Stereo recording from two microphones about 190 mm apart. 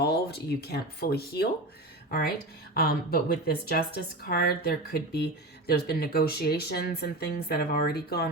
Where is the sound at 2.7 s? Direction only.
55° left (ahead or behind).